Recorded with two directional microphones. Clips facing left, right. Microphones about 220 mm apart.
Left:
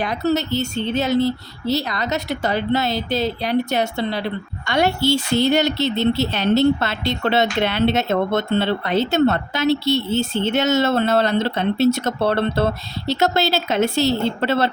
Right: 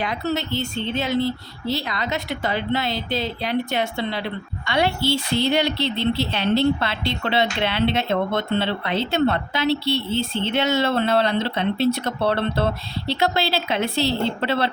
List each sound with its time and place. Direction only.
0.0 s a woman's voice: 40° left (ahead or behind)